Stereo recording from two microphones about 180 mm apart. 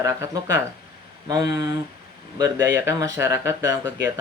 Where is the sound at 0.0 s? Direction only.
15° right (ahead or behind).